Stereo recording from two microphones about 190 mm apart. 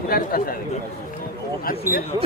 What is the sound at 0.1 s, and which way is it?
Speech, 50° left (ahead or behind).